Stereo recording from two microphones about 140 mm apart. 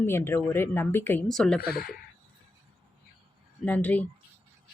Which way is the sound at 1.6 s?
90° left.